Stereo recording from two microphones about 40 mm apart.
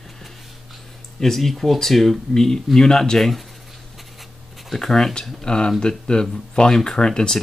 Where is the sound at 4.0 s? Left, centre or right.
Centre.